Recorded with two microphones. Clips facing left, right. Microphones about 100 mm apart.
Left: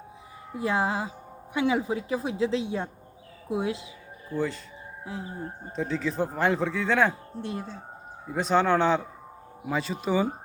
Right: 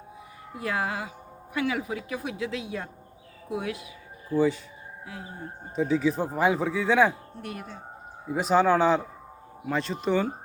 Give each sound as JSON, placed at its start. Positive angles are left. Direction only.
{"t": 0.5, "sound": "a woman's voice", "side_deg": 25}
{"t": 4.3, "sound": "speech", "side_deg": -5}
{"t": 5.7, "sound": "speech", "side_deg": -5}
{"t": 7.4, "sound": "a woman's voice", "side_deg": 25}
{"t": 8.3, "sound": "speech", "side_deg": -5}